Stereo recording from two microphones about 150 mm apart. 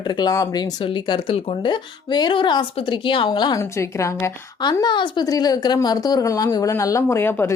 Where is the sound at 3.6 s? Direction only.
20° left (ahead or behind).